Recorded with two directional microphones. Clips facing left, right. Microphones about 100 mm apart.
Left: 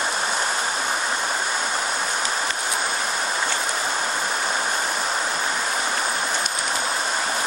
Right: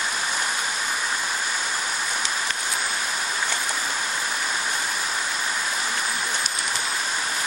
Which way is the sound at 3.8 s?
35° left (ahead or behind).